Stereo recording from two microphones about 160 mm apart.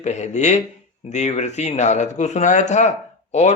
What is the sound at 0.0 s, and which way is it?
Speech, 45° left (ahead or behind).